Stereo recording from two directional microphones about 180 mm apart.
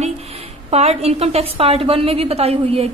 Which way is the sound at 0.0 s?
35° right (ahead or behind).